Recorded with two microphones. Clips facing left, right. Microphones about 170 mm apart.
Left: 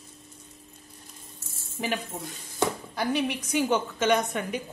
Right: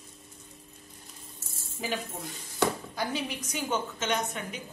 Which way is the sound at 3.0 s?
65° left (ahead or behind).